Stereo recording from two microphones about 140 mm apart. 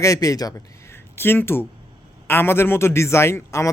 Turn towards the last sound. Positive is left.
turn(degrees=20)  # may be behind; listen again after turning